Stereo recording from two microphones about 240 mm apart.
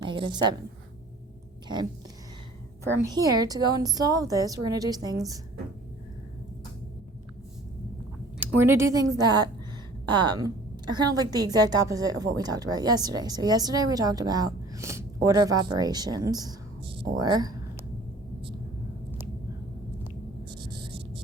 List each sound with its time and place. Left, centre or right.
0.0 s a woman's voice: centre
1.6 s speech: centre
3.0 s a woman's voice: centre
8.4 s a woman's voice: centre
20.1 s a sound: centre